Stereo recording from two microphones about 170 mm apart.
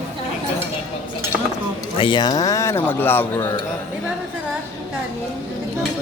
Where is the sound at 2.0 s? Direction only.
30° left (ahead or behind).